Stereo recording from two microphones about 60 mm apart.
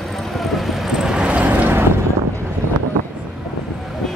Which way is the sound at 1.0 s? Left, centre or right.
Centre.